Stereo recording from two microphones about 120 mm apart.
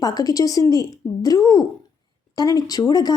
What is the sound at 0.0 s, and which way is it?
A woman's voice, 30° left (ahead or behind).